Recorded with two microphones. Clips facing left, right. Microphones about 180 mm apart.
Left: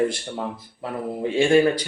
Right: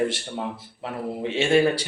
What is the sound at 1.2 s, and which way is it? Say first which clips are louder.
Speech: left 5 dB; 25° right (ahead or behind).